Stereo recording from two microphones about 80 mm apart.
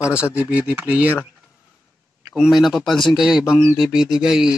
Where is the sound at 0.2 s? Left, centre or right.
Centre.